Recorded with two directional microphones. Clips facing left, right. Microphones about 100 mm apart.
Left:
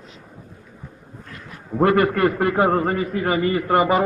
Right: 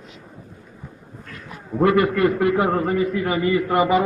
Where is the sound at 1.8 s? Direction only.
50° left (ahead or behind).